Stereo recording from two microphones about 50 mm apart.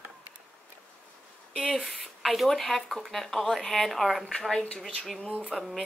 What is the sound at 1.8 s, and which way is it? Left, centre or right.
Speech, centre.